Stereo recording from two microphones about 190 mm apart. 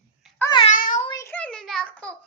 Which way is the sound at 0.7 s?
45° left (ahead or behind).